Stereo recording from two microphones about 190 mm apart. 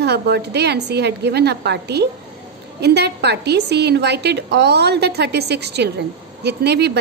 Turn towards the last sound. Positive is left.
turn(degrees=-60)  # may be behind; listen again after turning